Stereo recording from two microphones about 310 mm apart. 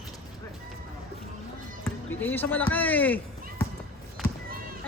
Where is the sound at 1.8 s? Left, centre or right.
Centre.